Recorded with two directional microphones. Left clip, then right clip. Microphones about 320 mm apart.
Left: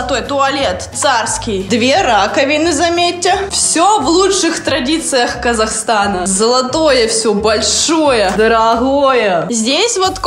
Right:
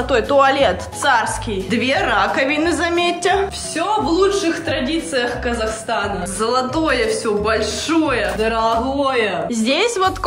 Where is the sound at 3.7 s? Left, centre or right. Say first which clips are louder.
Left 8 dB; left.